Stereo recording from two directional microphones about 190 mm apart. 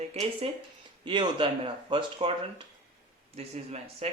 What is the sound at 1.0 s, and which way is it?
Speech, 25° right (ahead or behind).